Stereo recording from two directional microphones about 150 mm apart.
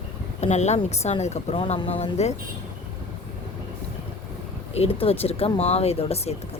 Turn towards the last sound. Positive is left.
turn(degrees=45)  # may be behind; listen again after turning